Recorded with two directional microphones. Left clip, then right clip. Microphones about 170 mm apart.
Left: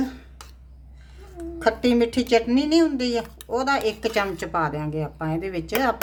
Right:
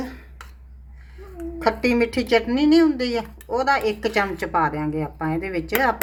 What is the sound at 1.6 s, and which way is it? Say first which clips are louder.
Speech: even; 15° left (ahead or behind).